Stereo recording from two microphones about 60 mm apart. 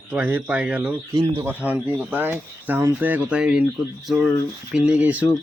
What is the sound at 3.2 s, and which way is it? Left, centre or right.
Speech, centre.